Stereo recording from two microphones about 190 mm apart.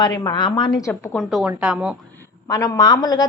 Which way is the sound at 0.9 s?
Centre (ahead or behind).